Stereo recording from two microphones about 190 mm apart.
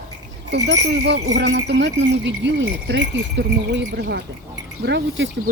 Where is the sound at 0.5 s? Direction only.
65° right (ahead or behind).